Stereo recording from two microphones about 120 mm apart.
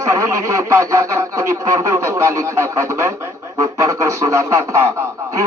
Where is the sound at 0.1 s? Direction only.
25° right (ahead or behind).